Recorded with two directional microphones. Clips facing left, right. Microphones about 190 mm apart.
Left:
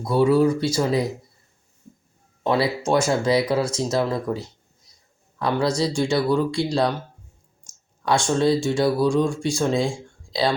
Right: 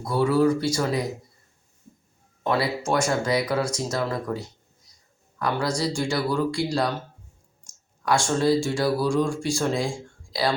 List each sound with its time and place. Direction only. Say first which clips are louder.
0.0 s speech: left 3 dB; 20° left (ahead or behind)
2.4 s speech: left 3 dB; 20° left (ahead or behind)
8.0 s speech: left 2 dB; 20° left (ahead or behind)